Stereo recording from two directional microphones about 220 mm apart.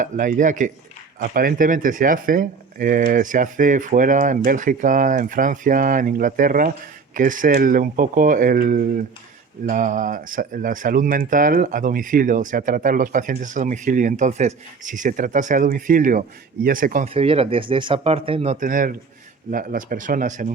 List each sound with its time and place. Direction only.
0.0 s speech: 35° right (ahead or behind)
17.2 s speech: 25° right (ahead or behind)